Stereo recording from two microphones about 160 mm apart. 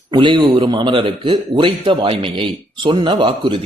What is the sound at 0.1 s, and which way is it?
A man's voice, 30° right (ahead or behind).